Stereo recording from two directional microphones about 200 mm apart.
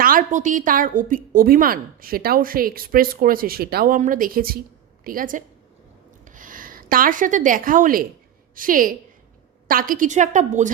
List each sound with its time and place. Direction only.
0.0 s a woman's voice: 45° right (ahead or behind)